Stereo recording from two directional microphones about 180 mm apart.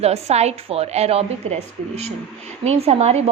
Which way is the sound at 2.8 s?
35° right (ahead or behind).